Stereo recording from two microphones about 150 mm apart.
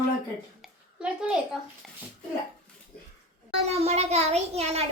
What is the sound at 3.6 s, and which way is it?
A child's voice, 45° right (ahead or behind).